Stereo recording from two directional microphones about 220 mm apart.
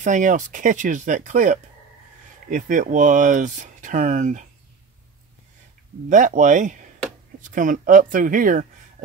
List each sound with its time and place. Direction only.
0.0 s speech: 35° right (ahead or behind)
6.0 s speech: 35° right (ahead or behind)